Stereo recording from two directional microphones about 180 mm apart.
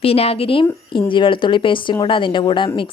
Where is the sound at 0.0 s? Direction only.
35° left (ahead or behind).